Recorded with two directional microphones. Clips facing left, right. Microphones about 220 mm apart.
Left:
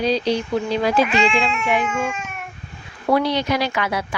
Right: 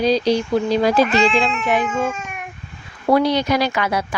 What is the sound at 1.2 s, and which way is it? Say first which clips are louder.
Speech: right 2 dB; 5° right (ahead or behind).